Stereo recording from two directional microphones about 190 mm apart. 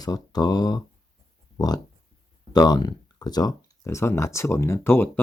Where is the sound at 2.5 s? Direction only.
20° left (ahead or behind).